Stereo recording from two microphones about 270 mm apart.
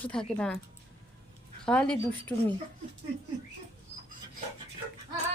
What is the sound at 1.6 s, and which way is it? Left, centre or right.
Speech, centre.